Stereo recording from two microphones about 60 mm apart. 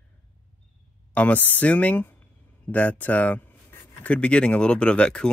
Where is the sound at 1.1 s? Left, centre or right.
Left.